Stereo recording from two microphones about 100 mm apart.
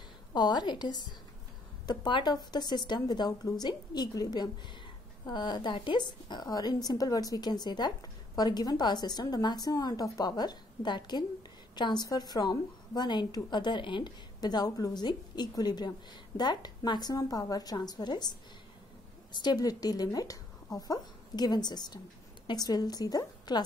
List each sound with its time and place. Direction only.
0.3 s a woman's voice: 45° left (ahead or behind)
19.3 s a woman's voice: 45° left (ahead or behind)